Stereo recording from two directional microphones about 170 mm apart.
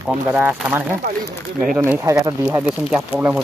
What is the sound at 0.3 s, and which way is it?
Speech, 10° right (ahead or behind).